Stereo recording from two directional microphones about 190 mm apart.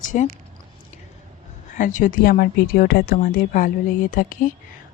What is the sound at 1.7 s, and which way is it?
Speech, 45° left (ahead or behind).